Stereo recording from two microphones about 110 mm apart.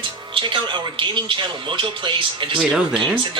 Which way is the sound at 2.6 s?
5° right (ahead or behind).